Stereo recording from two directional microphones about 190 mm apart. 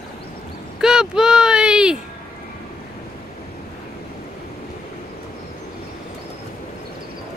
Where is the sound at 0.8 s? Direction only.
5° right (ahead or behind).